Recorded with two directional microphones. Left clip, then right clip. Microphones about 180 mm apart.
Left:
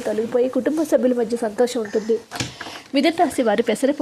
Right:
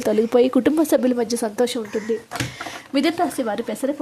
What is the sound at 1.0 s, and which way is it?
A woman's voice, 20° right (ahead or behind).